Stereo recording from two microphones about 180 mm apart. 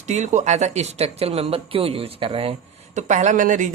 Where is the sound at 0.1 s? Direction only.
40° right (ahead or behind).